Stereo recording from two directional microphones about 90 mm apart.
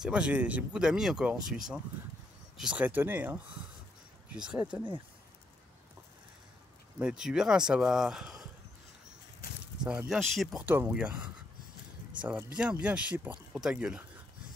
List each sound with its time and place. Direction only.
0.0 s speech: 10° right (ahead or behind)
4.3 s speech: 10° right (ahead or behind)
7.0 s speech: 10° right (ahead or behind)
10.0 s speech: centre (ahead or behind)
10.6 s speech: 20° right (ahead or behind)
13.5 s speech: 5° right (ahead or behind)